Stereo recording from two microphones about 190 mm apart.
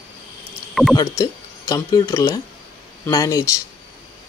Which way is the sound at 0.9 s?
20° left (ahead or behind).